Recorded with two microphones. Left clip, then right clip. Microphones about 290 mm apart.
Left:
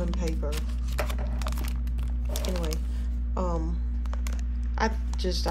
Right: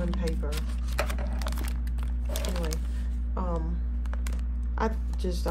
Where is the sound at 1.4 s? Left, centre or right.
Centre.